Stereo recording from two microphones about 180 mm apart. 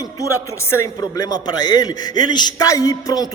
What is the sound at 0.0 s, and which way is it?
A man's voice, 20° left (ahead or behind).